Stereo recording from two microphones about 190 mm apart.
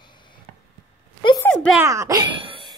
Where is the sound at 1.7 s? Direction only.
15° right (ahead or behind).